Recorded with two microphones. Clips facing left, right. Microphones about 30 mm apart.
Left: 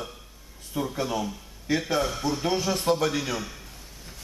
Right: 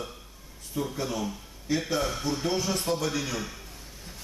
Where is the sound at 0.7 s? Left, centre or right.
Centre.